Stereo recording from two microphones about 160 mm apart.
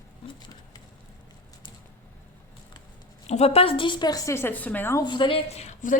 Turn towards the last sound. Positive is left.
turn(degrees=50)  # may be behind; listen again after turning